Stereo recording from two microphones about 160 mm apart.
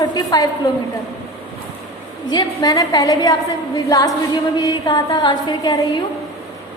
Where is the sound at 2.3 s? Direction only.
25° left (ahead or behind).